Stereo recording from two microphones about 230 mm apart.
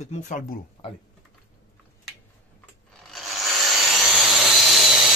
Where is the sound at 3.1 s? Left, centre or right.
Centre.